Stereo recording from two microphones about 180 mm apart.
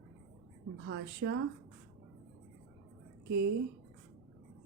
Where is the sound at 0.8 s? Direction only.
70° right (ahead or behind).